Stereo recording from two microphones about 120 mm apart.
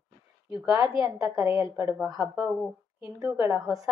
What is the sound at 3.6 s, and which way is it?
Speech, centre (ahead or behind).